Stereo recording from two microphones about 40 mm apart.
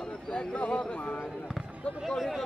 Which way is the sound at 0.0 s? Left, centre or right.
Left.